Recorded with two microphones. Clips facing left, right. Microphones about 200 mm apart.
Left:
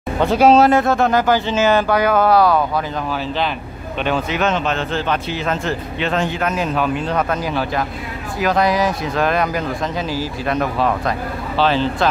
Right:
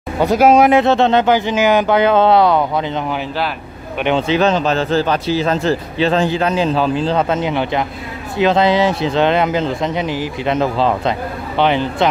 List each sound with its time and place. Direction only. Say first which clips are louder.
0.4 s speech: right 1 dB; 15° right (ahead or behind)
4.3 s a man's voice: right 5 dB; 35° right (ahead or behind)